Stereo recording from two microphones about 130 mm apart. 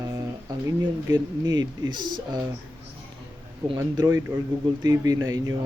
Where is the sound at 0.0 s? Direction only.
25° right (ahead or behind).